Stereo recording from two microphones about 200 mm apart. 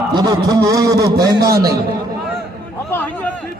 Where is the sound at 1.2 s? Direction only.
50° right (ahead or behind).